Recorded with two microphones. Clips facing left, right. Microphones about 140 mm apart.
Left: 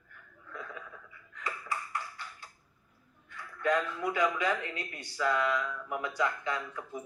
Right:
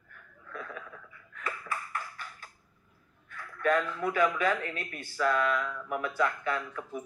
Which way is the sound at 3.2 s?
20° left (ahead or behind).